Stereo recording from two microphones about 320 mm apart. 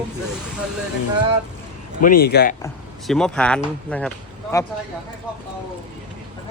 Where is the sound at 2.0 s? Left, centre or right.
Left.